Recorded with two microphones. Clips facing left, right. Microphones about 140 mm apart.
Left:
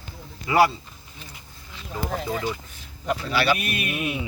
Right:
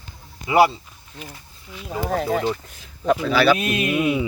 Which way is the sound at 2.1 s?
55° right (ahead or behind).